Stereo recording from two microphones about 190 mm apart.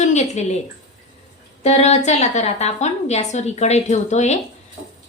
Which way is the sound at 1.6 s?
35° left (ahead or behind).